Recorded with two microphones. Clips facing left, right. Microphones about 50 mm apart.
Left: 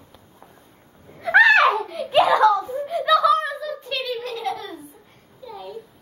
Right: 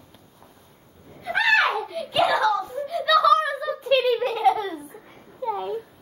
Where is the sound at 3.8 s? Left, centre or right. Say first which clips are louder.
Right 11 dB; right.